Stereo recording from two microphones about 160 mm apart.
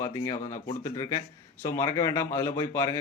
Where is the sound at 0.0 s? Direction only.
20° left (ahead or behind).